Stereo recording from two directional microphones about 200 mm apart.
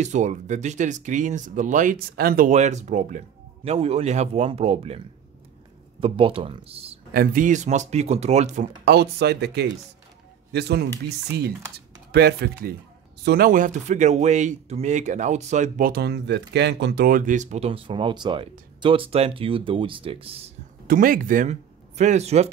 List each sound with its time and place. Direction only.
0.0 s speech: 35° right (ahead or behind)
7.2 s speech: 40° right (ahead or behind)
8.8 s speech: 55° right (ahead or behind)
12.1 s speech: 55° right (ahead or behind); by 20.5 s 30° right (ahead or behind)
20.8 s speech: 45° right (ahead or behind)